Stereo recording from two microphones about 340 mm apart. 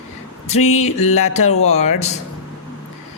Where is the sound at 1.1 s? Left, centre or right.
Centre.